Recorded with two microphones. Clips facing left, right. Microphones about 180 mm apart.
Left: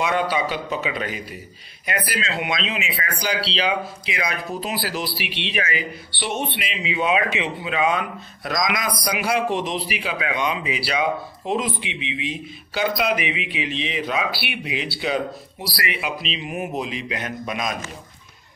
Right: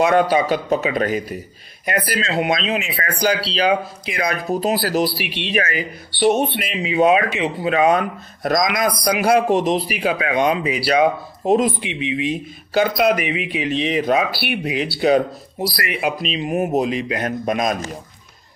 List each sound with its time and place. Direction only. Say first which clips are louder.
0.0 s speech: right 7 dB; 45° right (ahead or behind)